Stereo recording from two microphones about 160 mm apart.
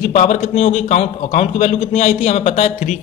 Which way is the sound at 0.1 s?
45° left (ahead or behind).